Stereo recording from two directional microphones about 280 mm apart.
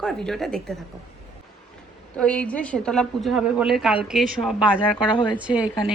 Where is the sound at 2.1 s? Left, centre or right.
Centre.